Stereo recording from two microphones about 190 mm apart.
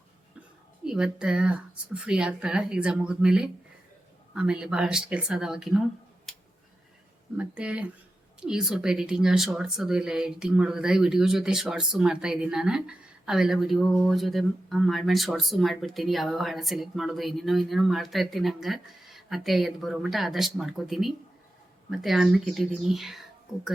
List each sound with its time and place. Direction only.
0.9 s speech: 5° right (ahead or behind)
6.3 s a sound: centre (ahead or behind)
7.3 s speech: 5° right (ahead or behind)